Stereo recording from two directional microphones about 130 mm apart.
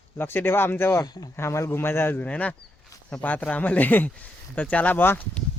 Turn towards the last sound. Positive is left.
turn(degrees=15)  # may be behind; listen again after turning